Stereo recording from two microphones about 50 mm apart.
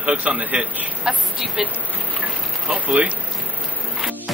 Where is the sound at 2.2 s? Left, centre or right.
Right.